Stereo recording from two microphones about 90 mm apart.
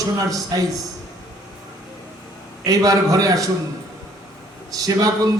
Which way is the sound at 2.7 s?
40° right (ahead or behind).